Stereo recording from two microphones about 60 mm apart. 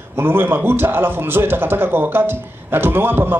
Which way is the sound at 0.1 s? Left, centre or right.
Right.